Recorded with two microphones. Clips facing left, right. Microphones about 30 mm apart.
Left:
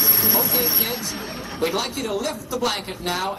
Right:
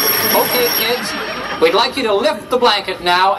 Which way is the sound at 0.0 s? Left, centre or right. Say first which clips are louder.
Right 9 dB; right.